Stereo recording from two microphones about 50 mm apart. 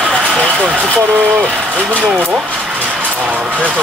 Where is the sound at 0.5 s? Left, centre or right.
Right.